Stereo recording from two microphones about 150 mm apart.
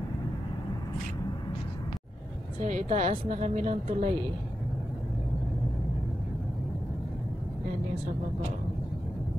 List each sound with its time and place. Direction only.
2.6 s a woman's voice: 50° right (ahead or behind)